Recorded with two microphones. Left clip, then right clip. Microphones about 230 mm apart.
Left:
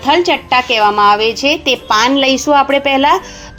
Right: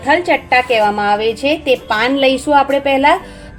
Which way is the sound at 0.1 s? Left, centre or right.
Left.